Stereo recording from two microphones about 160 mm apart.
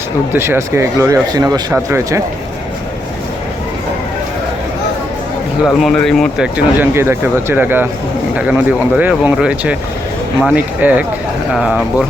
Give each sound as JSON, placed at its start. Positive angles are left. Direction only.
{"t": 0.3, "sound": "speech", "side_deg": -15}
{"t": 5.8, "sound": "speech", "side_deg": 0}
{"t": 6.9, "sound": "speech", "side_deg": -15}